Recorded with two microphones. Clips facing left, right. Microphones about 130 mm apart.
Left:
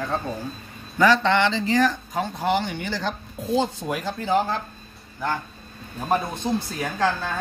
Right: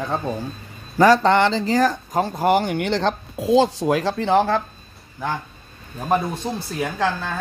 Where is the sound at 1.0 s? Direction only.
45° right (ahead or behind); by 4.6 s 70° right (ahead or behind).